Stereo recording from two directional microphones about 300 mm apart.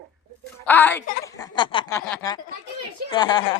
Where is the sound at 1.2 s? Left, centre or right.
Centre.